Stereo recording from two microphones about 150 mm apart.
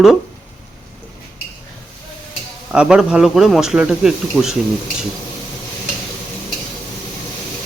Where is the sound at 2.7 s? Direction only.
5° right (ahead or behind).